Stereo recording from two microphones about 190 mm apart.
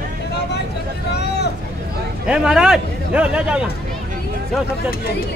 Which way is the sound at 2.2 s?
5° right (ahead or behind).